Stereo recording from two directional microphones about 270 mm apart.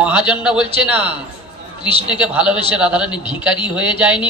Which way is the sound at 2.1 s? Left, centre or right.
Centre.